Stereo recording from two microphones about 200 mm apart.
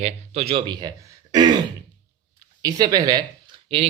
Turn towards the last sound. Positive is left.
turn(degrees=-25)  # may be behind; listen again after turning